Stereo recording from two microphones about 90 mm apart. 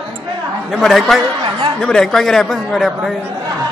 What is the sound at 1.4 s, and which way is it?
Chatter, 65° right (ahead or behind).